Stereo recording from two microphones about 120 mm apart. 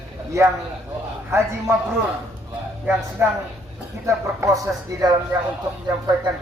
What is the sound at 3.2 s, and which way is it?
Speech, 20° right (ahead or behind).